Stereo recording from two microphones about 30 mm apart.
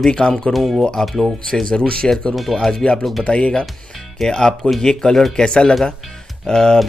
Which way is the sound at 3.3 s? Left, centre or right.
Left.